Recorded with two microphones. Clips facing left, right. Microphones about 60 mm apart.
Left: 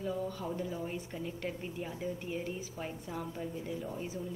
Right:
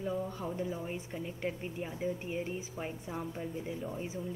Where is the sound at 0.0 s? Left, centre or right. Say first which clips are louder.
Even; right.